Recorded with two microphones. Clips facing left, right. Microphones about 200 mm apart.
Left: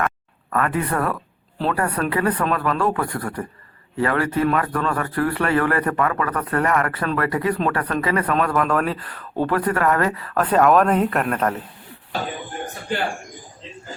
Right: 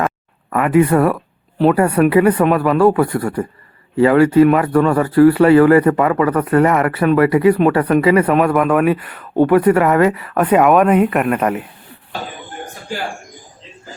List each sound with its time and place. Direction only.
0.8 s speech: 20° right (ahead or behind)
9.3 s speech: 25° right (ahead or behind)